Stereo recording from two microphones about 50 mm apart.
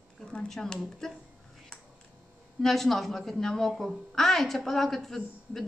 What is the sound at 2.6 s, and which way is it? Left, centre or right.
A woman's voice, centre.